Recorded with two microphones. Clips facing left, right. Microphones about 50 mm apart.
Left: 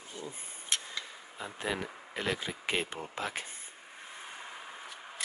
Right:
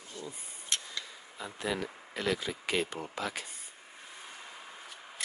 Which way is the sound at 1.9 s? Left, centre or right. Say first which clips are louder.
Left 1 dB; centre.